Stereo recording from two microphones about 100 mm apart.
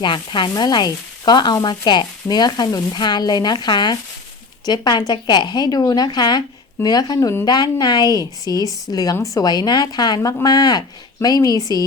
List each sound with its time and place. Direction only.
0.0 s sizzle: 50° left (ahead or behind)
6.8 s a woman's voice: 40° left (ahead or behind)